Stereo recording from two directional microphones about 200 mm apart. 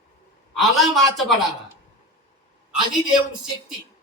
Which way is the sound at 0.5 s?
Centre (ahead or behind).